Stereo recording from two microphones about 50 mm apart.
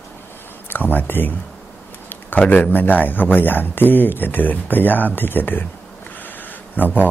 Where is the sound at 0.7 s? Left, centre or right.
Left.